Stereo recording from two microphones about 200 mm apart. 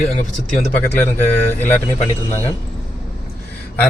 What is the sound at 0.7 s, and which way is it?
Speech, 10° left (ahead or behind).